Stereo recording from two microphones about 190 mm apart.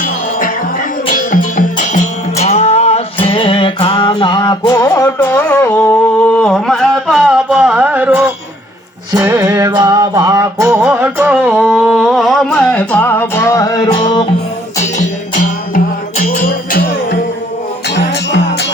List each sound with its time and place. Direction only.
0.0 s music: 45° left (ahead or behind); by 14.3 s 25° left (ahead or behind)
14.9 s music: 45° left (ahead or behind)
17.8 s music: 65° left (ahead or behind)